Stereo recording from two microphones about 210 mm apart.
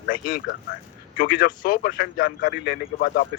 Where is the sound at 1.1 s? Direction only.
45° left (ahead or behind).